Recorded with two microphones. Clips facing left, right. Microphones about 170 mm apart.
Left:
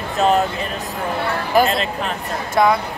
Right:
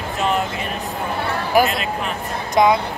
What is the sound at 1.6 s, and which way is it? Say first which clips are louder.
Speech: left 2 dB; 30° left (ahead or behind).